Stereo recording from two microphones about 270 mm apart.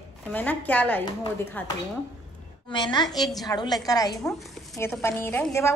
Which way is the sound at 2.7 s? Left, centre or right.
Centre.